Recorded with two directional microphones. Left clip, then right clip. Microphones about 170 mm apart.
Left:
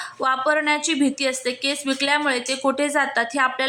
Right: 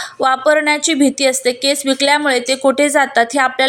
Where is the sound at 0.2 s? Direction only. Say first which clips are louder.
Right 7 dB; 25° right (ahead or behind).